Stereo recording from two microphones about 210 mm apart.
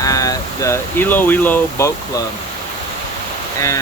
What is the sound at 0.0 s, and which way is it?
Speech, 15° left (ahead or behind).